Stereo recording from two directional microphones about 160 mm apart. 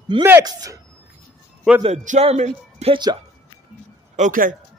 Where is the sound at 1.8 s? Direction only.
45° right (ahead or behind).